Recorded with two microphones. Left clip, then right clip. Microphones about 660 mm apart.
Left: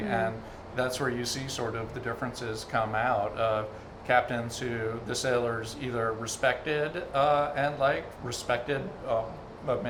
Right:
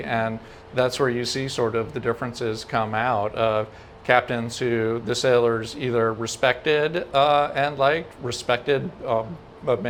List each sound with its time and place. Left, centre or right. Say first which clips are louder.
0.8 s speech: right 8 dB; right